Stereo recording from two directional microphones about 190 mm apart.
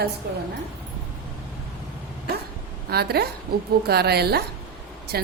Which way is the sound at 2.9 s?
60° right (ahead or behind).